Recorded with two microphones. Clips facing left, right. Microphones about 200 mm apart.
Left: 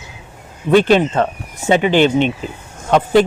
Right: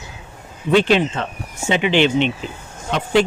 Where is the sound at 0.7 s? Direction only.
50° left (ahead or behind).